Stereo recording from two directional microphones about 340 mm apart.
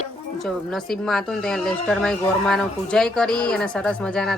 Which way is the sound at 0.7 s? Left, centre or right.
Centre.